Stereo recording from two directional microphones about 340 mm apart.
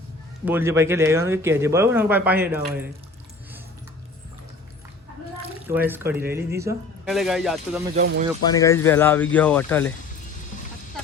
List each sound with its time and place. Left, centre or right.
0.4 s speech: centre
5.6 s speech: centre
7.9 s speech: right
8.4 s speech: centre